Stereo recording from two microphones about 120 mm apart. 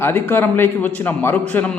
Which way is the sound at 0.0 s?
20° left (ahead or behind).